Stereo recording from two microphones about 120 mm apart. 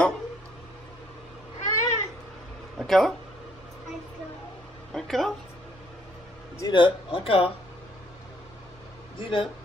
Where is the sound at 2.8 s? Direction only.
Centre (ahead or behind).